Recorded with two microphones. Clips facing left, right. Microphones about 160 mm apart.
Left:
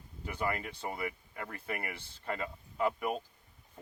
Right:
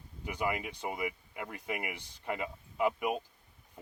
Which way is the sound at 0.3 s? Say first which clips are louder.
Right 1 dB; 15° right (ahead or behind).